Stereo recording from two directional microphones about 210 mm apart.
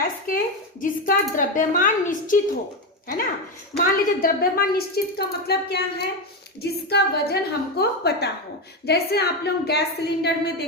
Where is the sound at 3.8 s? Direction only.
45° left (ahead or behind).